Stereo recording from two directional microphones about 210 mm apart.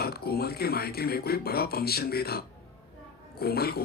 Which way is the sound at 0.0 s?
50° left (ahead or behind).